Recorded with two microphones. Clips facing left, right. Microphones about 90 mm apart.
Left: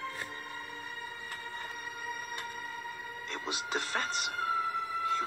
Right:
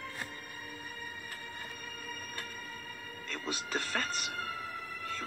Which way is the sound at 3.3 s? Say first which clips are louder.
Left 1 dB; 20° left (ahead or behind).